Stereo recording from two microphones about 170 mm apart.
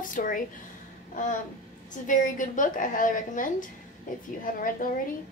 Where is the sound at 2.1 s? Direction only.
50° left (ahead or behind).